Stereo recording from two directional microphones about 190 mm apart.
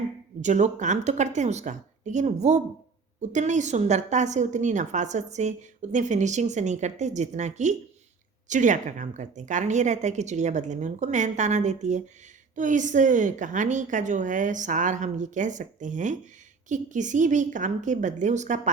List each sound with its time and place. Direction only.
0.4 s a woman's voice: 40° right (ahead or behind)